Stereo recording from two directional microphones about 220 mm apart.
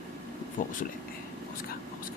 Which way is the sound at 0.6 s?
40° left (ahead or behind).